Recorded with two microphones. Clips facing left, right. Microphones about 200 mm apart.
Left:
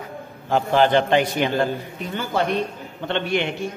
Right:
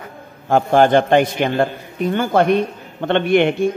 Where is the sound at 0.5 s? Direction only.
50° right (ahead or behind).